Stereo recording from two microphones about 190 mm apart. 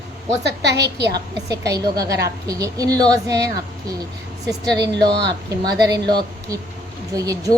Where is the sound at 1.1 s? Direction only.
20° right (ahead or behind).